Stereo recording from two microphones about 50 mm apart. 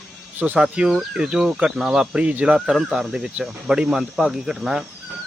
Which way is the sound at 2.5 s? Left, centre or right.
Centre.